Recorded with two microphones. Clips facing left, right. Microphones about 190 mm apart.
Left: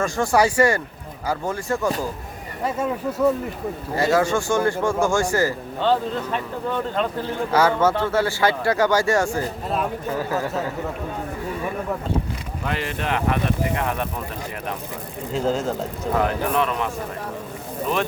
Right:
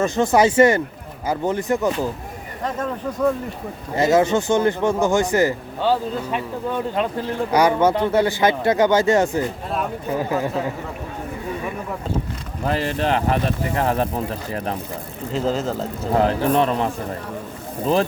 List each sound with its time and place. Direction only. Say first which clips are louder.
0.0 s a man's voice: right 3 dB; 20° right (ahead or behind)
2.6 s speech: left 1 dB; 10° left (ahead or behind)
3.9 s a man's voice: right 3 dB; 20° right (ahead or behind)
12.6 s speech: right 5 dB; 35° right (ahead or behind)
15.3 s speech: even; 5° right (ahead or behind)
16.1 s speech: right 4 dB; 30° right (ahead or behind)